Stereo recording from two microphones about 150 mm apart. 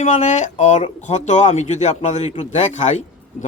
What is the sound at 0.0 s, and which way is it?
A man's voice, 55° left (ahead or behind).